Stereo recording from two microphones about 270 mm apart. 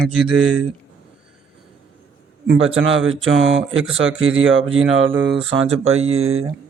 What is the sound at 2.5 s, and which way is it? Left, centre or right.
Speech, right.